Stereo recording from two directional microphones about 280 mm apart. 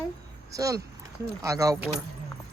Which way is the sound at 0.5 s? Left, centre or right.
Centre.